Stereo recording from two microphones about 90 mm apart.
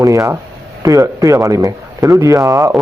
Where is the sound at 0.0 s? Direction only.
35° right (ahead or behind).